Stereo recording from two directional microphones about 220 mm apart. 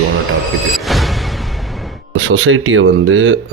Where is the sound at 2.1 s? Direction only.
60° right (ahead or behind).